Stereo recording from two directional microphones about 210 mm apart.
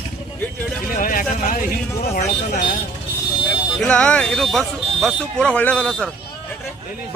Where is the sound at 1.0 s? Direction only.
40° left (ahead or behind).